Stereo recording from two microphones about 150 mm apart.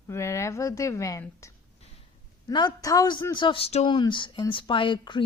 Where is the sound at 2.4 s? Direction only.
25° left (ahead or behind).